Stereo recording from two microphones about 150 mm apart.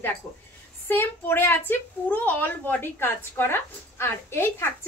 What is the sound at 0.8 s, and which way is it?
A woman's voice, 15° left (ahead or behind).